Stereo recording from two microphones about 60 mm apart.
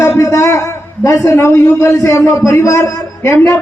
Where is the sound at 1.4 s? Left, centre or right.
Left.